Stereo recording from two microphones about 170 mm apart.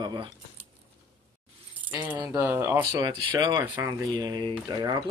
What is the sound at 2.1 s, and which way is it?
Speech, 10° right (ahead or behind).